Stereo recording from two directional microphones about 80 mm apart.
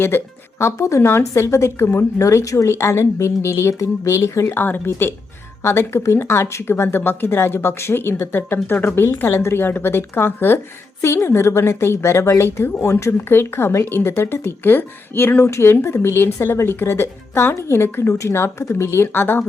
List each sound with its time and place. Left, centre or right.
0.1 s speech: left
0.6 s speech: left
2.2 s speech: left